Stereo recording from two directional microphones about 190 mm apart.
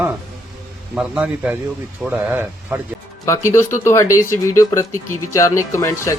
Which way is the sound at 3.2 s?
15° left (ahead or behind).